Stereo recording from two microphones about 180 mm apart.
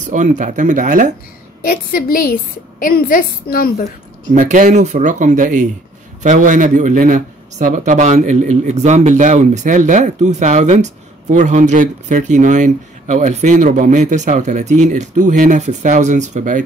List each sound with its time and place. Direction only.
0.0 s speech: 45° right (ahead or behind)
1.6 s a woman's voice: 55° left (ahead or behind)
4.4 s speech: 40° right (ahead or behind)